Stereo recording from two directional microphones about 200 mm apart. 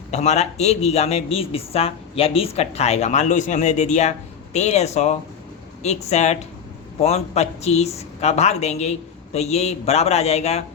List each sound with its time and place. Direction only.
0.1 s speech: 35° left (ahead or behind)